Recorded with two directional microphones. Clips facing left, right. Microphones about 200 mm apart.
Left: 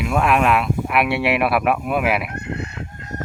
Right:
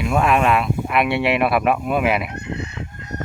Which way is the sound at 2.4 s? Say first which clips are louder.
Even; 50° left (ahead or behind).